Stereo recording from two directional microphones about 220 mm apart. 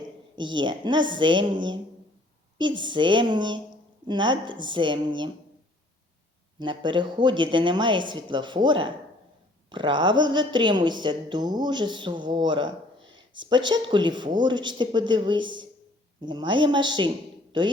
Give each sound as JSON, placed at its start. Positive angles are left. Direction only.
{"t": 0.3, "sound": "a woman's voice", "side_deg": -20}
{"t": 2.6, "sound": "a woman's voice", "side_deg": -20}
{"t": 6.6, "sound": "a woman's voice", "side_deg": -20}